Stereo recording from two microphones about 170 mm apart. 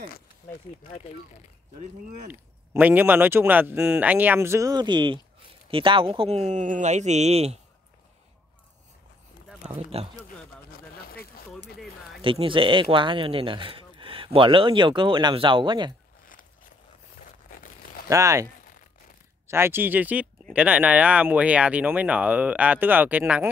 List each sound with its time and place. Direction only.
1.8 s speech: 45° right (ahead or behind)
2.7 s speech: 10° right (ahead or behind); by 7.5 s 40° right (ahead or behind)
10.2 s speech: 60° left (ahead or behind)
12.2 s speech: 30° right (ahead or behind)
17.4 s a sound: 60° left (ahead or behind)
18.0 s speech: 20° right (ahead or behind)